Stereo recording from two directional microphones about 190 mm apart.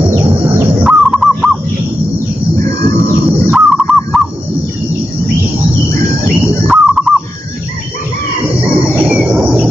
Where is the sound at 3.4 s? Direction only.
Centre (ahead or behind).